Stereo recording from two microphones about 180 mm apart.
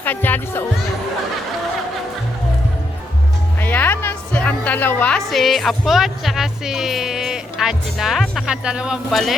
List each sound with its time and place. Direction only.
0.0 s speech: 10° left (ahead or behind)
3.6 s music: 10° left (ahead or behind)